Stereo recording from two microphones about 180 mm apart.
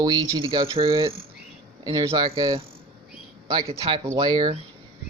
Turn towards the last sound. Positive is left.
turn(degrees=-25)  # may be behind; listen again after turning